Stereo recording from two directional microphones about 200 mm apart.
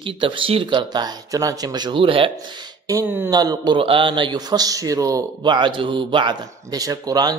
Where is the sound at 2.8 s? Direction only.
15° right (ahead or behind).